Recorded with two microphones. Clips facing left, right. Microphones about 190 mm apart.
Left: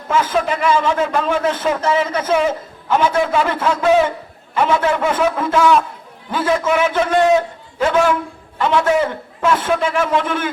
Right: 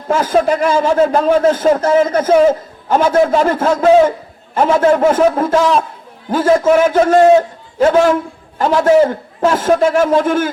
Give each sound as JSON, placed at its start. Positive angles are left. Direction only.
{"t": 0.1, "sound": "a man's voice", "side_deg": -45}